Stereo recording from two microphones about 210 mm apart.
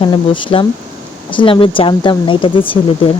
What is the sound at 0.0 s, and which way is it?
Speech, 20° left (ahead or behind).